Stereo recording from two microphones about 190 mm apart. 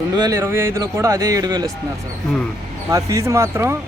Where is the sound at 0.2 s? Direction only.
15° right (ahead or behind).